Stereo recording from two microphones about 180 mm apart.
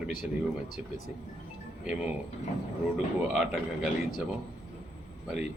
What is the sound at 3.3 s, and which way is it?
Speech, 5° right (ahead or behind).